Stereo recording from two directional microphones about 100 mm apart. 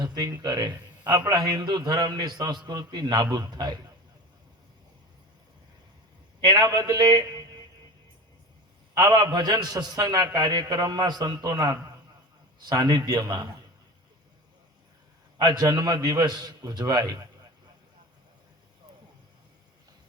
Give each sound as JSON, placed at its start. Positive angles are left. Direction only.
{"t": 0.0, "sound": "a man's voice", "side_deg": -40}
{"t": 6.4, "sound": "a man's voice", "side_deg": -40}
{"t": 9.0, "sound": "a man's voice", "side_deg": -40}
{"t": 15.4, "sound": "a man's voice", "side_deg": -40}